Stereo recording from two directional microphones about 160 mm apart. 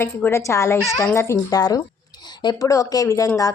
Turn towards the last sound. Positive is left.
turn(degrees=20)  # may be behind; listen again after turning